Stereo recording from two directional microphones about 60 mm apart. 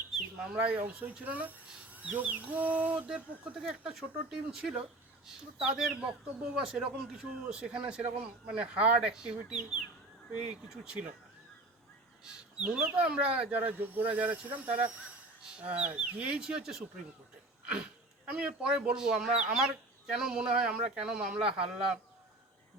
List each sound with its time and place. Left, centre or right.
0.1 s speech: centre
0.8 s speech: right
3.5 s speech: centre
12.2 s speech: centre
15.4 s speech: centre
16.4 s speech: centre
18.3 s speech: centre